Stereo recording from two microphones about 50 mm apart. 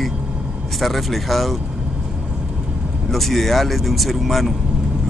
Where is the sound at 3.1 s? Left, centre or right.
Centre.